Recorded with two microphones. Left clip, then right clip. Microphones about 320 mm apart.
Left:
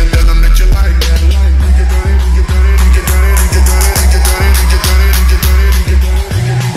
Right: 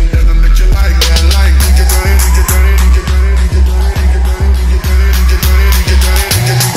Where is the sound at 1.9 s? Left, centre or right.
Right.